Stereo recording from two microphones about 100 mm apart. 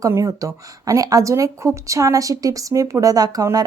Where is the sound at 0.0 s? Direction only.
30° right (ahead or behind).